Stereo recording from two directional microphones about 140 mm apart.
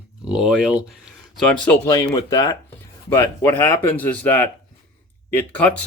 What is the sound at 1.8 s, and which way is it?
Speech, 25° left (ahead or behind).